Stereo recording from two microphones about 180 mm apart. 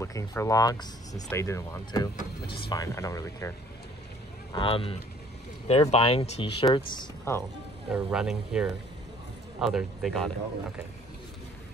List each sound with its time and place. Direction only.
0.0 s speech: 15° left (ahead or behind)
2.1 s speech: 60° left (ahead or behind)
2.7 s speech: 20° left (ahead or behind)
4.5 s speech: 30° left (ahead or behind)
7.9 s speech: 5° right (ahead or behind)